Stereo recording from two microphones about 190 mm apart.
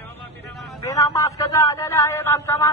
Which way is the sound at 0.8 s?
15° left (ahead or behind).